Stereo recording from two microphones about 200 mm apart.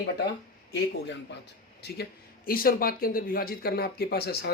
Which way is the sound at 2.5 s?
45° left (ahead or behind).